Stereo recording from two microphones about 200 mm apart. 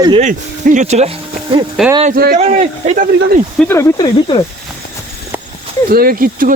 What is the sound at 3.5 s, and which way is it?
Speech, 10° left (ahead or behind).